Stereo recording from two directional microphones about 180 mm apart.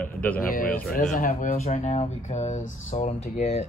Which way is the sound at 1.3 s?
35° left (ahead or behind).